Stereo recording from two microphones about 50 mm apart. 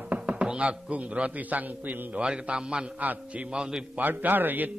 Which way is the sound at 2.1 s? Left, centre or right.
Right.